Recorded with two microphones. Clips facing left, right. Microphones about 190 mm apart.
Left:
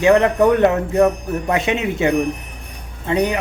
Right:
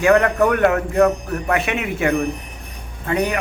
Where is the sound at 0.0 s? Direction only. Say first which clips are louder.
Left 2 dB; 20° left (ahead or behind).